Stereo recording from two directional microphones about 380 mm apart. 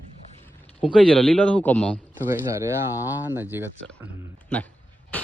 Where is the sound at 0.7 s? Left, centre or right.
Centre.